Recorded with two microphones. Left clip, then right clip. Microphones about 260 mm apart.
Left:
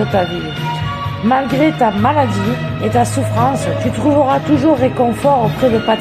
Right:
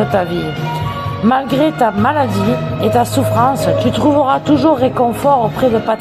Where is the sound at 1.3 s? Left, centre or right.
Centre.